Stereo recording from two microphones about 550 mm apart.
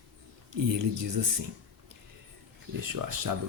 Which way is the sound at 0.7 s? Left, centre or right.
Right.